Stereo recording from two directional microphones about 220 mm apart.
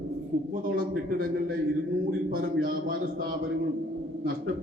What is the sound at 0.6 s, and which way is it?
Speech, 40° right (ahead or behind).